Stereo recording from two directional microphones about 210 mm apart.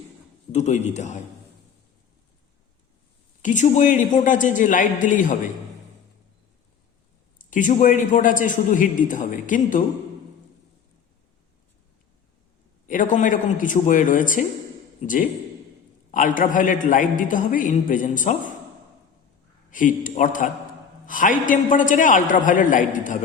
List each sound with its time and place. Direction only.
0.5 s a man's voice: 35° left (ahead or behind)
3.4 s a man's voice: 35° left (ahead or behind)
7.3 s a man's voice: 40° left (ahead or behind)
12.9 s a man's voice: 40° left (ahead or behind)
19.7 s a man's voice: 40° left (ahead or behind)